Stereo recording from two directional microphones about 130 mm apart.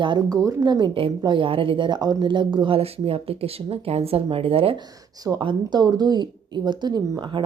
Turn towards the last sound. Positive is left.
turn(degrees=-35)  # may be behind; listen again after turning